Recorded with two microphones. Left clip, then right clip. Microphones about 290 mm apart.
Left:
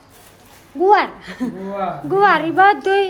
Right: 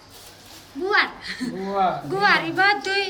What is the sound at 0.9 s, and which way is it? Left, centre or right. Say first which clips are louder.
A woman's voice: left 6 dB; centre.